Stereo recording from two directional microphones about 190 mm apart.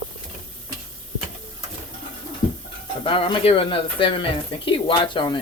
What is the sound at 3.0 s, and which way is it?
Speech, 25° left (ahead or behind).